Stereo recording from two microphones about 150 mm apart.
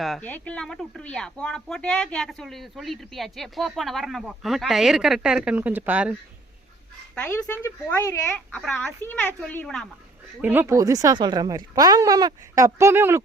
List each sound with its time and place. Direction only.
0.0 s speech: centre (ahead or behind)
7.3 s a woman's voice: 15° left (ahead or behind)
10.4 s speech: 15° right (ahead or behind)